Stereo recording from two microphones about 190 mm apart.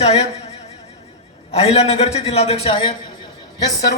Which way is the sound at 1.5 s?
30° left (ahead or behind).